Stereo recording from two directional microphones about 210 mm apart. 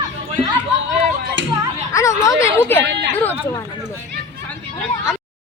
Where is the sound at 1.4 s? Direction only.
60° right (ahead or behind).